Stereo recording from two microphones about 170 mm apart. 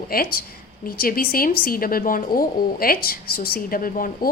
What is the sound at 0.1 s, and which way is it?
Speech, 60° left (ahead or behind).